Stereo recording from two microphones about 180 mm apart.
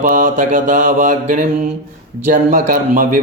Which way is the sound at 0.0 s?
45° right (ahead or behind).